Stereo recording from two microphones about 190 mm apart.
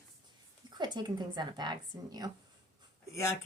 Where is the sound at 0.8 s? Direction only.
20° right (ahead or behind).